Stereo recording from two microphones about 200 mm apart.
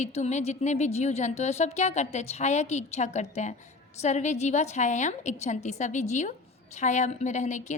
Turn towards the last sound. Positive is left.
turn(degrees=35)  # may be behind; listen again after turning